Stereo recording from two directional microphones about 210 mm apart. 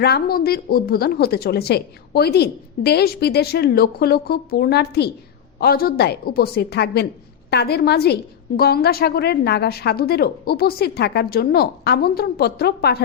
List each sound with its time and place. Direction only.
0.0 s a woman's voice: 45° left (ahead or behind)